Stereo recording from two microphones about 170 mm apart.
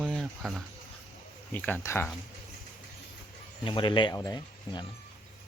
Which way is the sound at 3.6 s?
30° left (ahead or behind).